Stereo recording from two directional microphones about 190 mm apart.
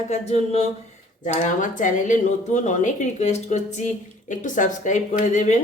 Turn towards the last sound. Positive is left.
turn(degrees=40)  # may be behind; listen again after turning